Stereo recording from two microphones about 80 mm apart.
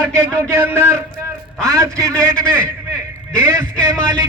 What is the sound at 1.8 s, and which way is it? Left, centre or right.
Speech, right.